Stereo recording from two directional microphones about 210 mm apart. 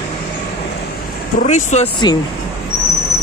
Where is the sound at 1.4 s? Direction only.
30° left (ahead or behind).